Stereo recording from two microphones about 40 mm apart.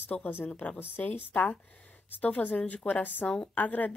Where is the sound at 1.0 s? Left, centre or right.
Left.